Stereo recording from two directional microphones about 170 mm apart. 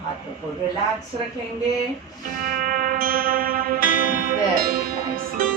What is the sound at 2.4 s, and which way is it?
Music, 55° right (ahead or behind).